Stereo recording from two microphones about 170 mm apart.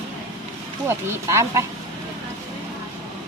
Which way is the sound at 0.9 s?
15° right (ahead or behind).